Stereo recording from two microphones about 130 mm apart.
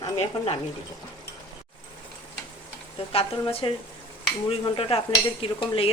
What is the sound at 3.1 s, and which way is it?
Speech, 45° left (ahead or behind).